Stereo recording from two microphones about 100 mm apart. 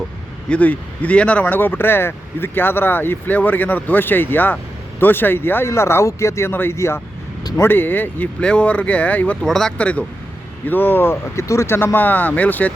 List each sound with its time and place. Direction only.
0.5 s speech: 15° left (ahead or behind)
9.5 s speech: 5° left (ahead or behind)